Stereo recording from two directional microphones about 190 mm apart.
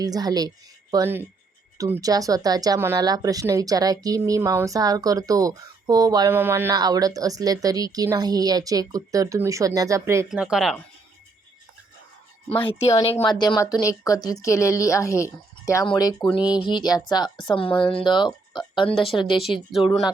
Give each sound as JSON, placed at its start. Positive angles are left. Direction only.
{"t": 0.0, "sound": "a woman's voice", "side_deg": -20}
{"t": 10.2, "sound": "speech", "side_deg": -5}
{"t": 12.8, "sound": "speech", "side_deg": 15}
{"t": 16.4, "sound": "speech", "side_deg": -5}
{"t": 16.6, "sound": "a woman's voice", "side_deg": 20}
{"t": 17.7, "sound": "speech", "side_deg": 5}
{"t": 17.9, "sound": "a woman's voice", "side_deg": 25}
{"t": 19.4, "sound": "speech", "side_deg": 0}